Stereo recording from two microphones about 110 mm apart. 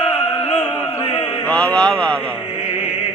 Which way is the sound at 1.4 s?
10° left (ahead or behind).